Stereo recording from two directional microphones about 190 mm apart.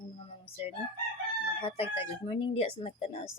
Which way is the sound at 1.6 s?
30° left (ahead or behind).